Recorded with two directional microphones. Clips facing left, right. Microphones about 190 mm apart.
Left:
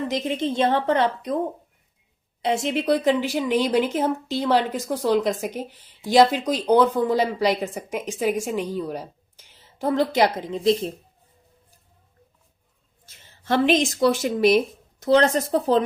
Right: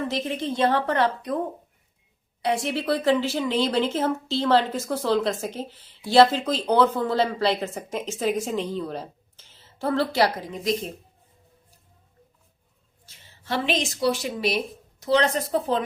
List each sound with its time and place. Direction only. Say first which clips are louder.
0.1 s a woman's voice: left 3 dB; 20° left (ahead or behind)
2.4 s speech: left 2 dB; 20° left (ahead or behind)
13.4 s a woman's voice: left 7 dB; 50° left (ahead or behind)